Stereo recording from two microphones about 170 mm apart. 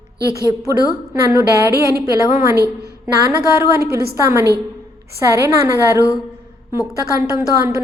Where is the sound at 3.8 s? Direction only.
65° right (ahead or behind).